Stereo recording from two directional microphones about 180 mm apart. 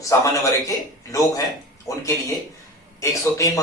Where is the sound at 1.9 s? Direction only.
20° left (ahead or behind).